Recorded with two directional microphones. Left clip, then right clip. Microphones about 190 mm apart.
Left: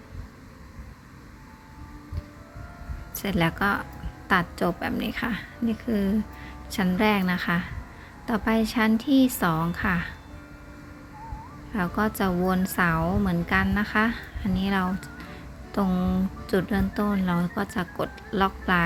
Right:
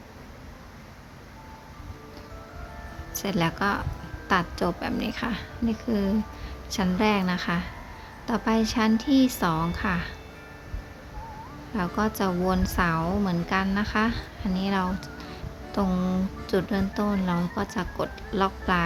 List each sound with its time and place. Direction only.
3.2 s a woman's voice: 15° left (ahead or behind)
11.7 s a woman's voice: 20° left (ahead or behind)